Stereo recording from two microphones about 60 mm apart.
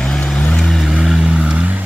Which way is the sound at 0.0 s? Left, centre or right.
Centre.